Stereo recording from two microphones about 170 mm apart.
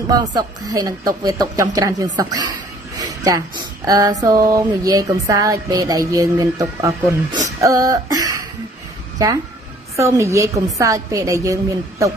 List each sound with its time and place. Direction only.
0.1 s a woman's voice: 20° right (ahead or behind)